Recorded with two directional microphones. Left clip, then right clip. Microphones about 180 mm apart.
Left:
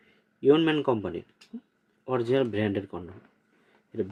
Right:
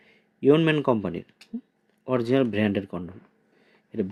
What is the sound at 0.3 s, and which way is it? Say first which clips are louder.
Speech: right 2 dB; 45° right (ahead or behind).